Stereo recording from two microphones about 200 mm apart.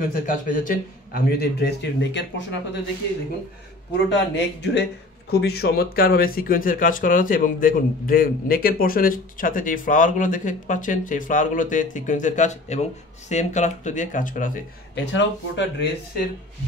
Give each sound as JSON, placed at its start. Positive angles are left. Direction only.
{"t": 0.0, "sound": "speech", "side_deg": 45}
{"t": 4.1, "sound": "speech", "side_deg": 60}
{"t": 15.0, "sound": "speech", "side_deg": 60}